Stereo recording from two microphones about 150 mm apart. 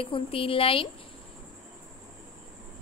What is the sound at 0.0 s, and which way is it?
Speech, 35° left (ahead or behind).